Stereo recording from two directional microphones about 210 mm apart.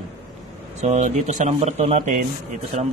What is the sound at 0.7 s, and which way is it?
Speech, 35° right (ahead or behind).